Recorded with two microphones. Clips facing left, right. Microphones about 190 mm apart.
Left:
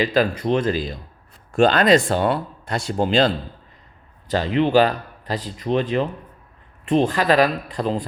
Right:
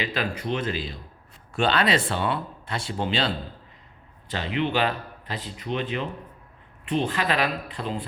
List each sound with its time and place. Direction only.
0.0 s a man's voice: 40° left (ahead or behind)